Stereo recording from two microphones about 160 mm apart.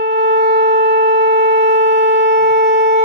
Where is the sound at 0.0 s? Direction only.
90° right.